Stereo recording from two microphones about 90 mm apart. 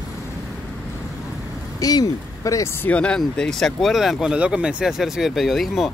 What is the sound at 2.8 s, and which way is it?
Speech, 10° left (ahead or behind).